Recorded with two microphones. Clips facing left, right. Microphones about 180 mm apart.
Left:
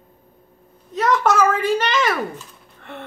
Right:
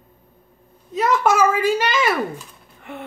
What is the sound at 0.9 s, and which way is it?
Speech, 10° right (ahead or behind).